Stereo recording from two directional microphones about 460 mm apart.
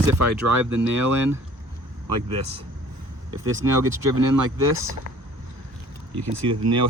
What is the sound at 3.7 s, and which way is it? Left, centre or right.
Speech, right.